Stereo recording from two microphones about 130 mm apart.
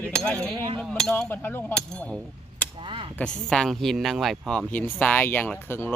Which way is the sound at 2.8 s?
40° right (ahead or behind).